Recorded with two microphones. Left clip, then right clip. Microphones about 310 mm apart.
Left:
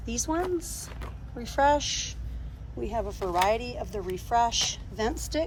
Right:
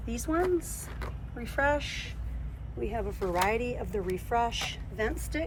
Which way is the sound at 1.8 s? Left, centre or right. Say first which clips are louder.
Left 6 dB; centre.